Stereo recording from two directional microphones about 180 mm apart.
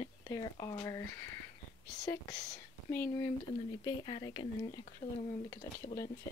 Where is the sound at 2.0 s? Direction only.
20° left (ahead or behind).